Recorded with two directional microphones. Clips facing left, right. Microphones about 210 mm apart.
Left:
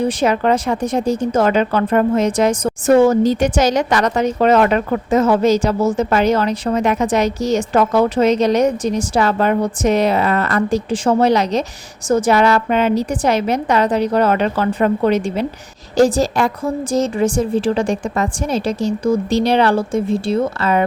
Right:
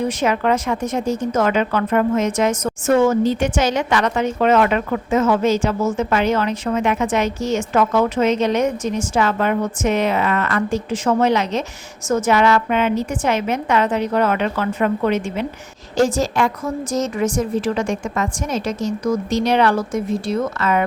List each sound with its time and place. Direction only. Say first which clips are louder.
0.0 s speech: left 3 dB; 35° left (ahead or behind)